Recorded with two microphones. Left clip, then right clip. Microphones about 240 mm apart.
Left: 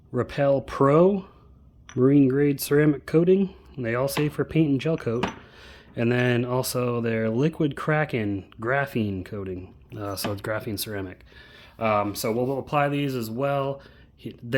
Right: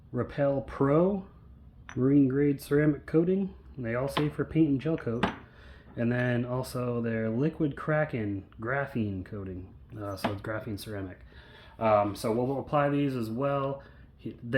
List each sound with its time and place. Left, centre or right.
0.1 s speech: left